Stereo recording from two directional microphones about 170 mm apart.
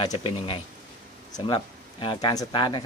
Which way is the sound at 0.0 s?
25° left (ahead or behind).